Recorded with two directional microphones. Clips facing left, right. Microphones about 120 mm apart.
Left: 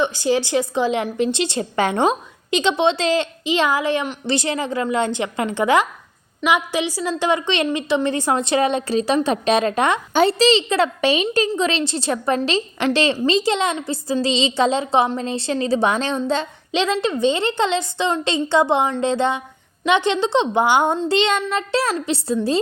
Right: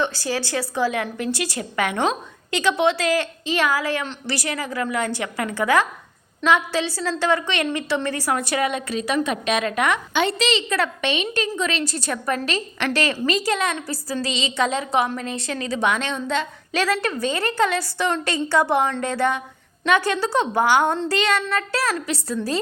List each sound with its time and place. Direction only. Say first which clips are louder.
0.0 s a woman's voice: left 5 dB; 20° left (ahead or behind)
16.7 s a woman's voice: left 3 dB; 20° left (ahead or behind)